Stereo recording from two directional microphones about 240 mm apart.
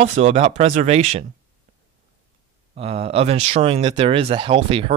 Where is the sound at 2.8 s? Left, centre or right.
Right.